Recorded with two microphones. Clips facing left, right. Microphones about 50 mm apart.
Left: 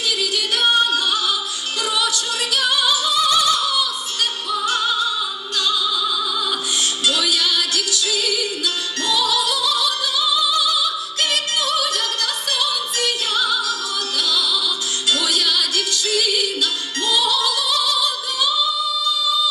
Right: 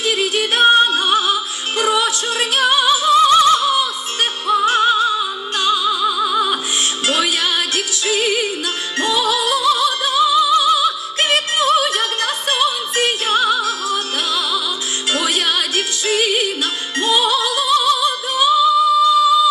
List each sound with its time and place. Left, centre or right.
0.0 s music: right